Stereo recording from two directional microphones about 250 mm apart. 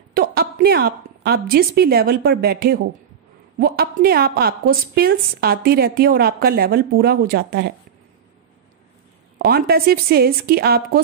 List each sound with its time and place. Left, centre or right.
0.1 s a woman's voice: right
9.4 s a woman's voice: right